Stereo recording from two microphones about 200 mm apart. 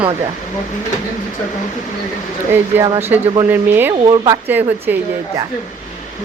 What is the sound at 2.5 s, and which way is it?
Speech, 15° right (ahead or behind).